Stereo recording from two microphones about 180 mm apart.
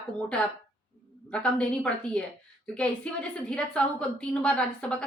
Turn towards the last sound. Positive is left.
turn(degrees=5)  # may be behind; listen again after turning